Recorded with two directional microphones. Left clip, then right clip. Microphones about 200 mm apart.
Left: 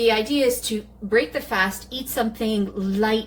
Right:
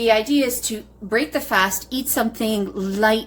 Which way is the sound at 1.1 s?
45° right (ahead or behind).